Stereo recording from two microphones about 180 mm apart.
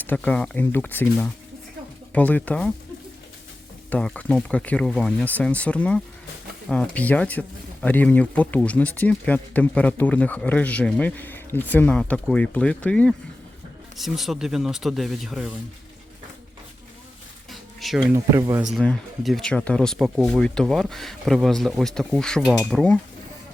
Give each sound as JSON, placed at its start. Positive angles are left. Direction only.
{"t": 0.0, "sound": "speech", "side_deg": 10}
{"t": 3.8, "sound": "speech", "side_deg": 5}
{"t": 17.5, "sound": "a sound", "side_deg": 0}
{"t": 18.1, "sound": "speech", "side_deg": -15}
{"t": 18.7, "sound": "speech", "side_deg": 5}